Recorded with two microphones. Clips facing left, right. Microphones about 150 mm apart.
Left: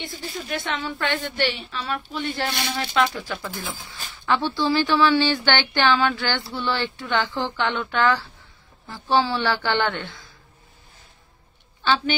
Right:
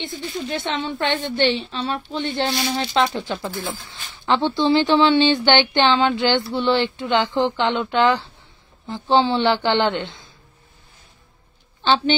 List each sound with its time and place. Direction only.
0.5 s speech: 25° right (ahead or behind)
11.8 s speech: 25° right (ahead or behind)